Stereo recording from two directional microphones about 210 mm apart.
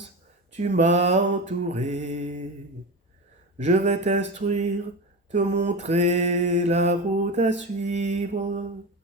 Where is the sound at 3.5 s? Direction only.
35° right (ahead or behind).